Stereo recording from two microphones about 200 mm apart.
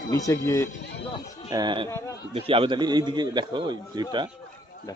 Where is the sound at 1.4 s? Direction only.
20° right (ahead or behind).